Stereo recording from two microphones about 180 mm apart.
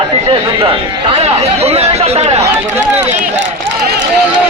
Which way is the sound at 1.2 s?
35° right (ahead or behind).